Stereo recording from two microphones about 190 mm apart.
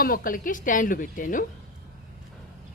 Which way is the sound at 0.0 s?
50° left (ahead or behind).